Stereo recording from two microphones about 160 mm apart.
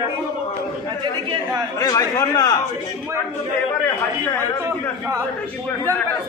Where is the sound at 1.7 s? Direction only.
20° left (ahead or behind).